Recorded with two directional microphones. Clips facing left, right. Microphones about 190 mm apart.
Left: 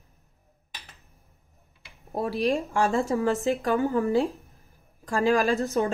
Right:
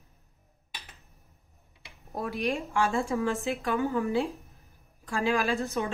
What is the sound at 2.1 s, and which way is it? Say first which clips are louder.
A woman's voice: left 5 dB; 30° left (ahead or behind).